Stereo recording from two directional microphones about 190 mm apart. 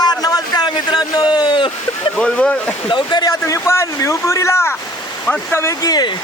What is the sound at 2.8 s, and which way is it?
Speech, 25° left (ahead or behind).